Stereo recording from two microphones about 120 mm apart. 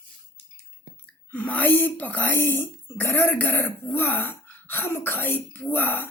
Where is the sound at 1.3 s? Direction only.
15° left (ahead or behind).